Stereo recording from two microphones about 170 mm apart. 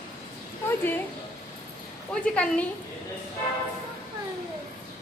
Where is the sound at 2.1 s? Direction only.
5° left (ahead or behind).